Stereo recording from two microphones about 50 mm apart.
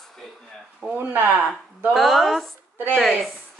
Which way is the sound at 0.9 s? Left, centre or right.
Right.